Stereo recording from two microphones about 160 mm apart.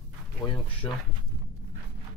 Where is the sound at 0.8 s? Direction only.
20° left (ahead or behind).